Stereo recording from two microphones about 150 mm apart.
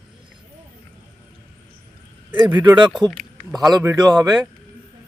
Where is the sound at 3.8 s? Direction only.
25° right (ahead or behind).